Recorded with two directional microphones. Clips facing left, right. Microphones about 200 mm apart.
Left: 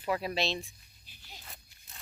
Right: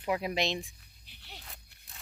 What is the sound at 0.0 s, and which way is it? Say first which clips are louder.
Speech: right 1 dB; 15° right (ahead or behind).